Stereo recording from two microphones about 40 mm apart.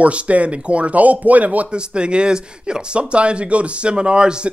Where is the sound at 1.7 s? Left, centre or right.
Right.